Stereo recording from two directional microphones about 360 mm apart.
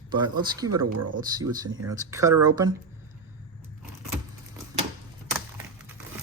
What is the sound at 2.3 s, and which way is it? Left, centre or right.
Speech, right.